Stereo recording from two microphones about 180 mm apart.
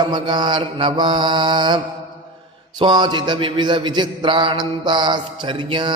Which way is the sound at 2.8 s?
25° right (ahead or behind).